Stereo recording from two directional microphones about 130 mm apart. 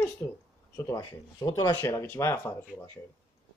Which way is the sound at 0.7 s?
25° left (ahead or behind).